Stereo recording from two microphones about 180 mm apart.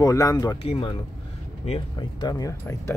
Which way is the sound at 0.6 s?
30° left (ahead or behind).